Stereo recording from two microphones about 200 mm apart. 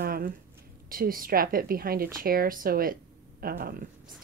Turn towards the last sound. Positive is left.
turn(degrees=-50)  # may be behind; listen again after turning